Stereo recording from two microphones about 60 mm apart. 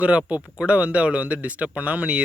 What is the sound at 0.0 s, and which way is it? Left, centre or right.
Speech, right.